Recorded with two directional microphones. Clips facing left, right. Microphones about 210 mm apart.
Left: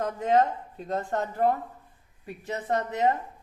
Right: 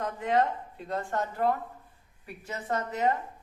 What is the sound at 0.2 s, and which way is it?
Speech, 40° left (ahead or behind).